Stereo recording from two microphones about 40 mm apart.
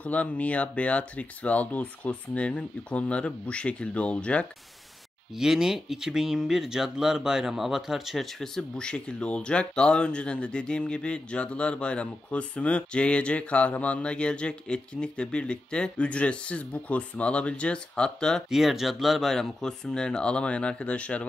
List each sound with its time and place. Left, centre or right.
0.0 s speech: left
5.3 s speech: centre
8.3 s speech: centre
8.7 s speech: left
18.5 s speech: centre
19.3 s speech: centre; by 21.3 s left